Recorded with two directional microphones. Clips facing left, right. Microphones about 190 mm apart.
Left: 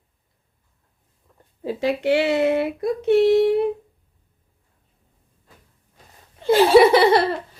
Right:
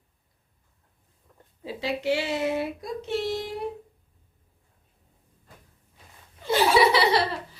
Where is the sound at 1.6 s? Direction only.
50° left (ahead or behind).